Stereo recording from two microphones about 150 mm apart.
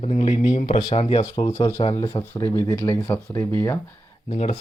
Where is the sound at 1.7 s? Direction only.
50° left (ahead or behind).